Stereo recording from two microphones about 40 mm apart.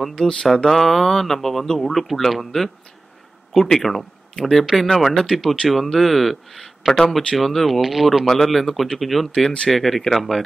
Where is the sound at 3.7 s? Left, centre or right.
Centre.